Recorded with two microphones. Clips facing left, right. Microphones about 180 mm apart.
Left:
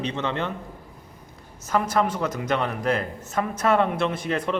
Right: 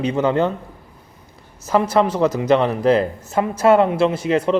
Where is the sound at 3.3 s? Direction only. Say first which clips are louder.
Right 7 dB; 30° right (ahead or behind).